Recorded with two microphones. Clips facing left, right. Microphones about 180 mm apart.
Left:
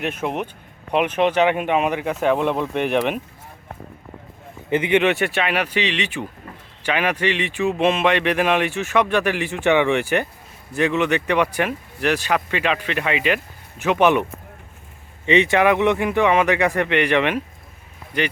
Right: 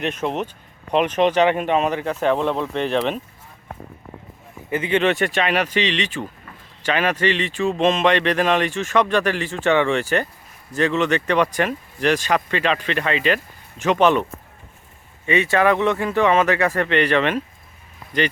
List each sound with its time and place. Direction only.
0.0 s speech: 10° left (ahead or behind)
4.7 s speech: 15° left (ahead or behind)
15.3 s speech: 20° left (ahead or behind)